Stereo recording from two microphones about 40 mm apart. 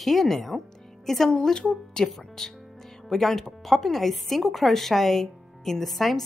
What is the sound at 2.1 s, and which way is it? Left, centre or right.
Speech, centre.